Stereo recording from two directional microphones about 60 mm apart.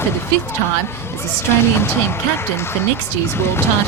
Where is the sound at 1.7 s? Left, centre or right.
Left.